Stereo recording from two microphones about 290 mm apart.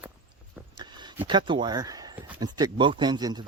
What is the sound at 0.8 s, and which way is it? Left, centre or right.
Speech, centre.